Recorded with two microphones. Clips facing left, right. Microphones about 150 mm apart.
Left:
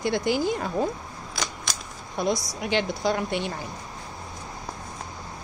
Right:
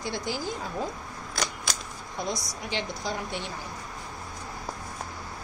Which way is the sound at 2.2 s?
65° left (ahead or behind).